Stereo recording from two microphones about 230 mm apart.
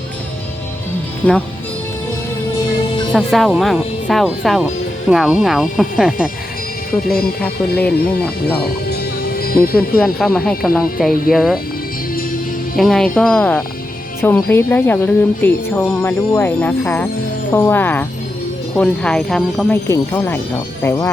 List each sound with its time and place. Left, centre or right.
3.1 s speech: centre
7.1 s speech: left
7.4 s speech: centre
8.9 s music: left
10.0 s speech: centre
12.7 s speech: centre